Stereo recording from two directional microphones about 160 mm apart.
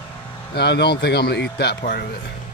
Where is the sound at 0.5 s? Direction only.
90° left.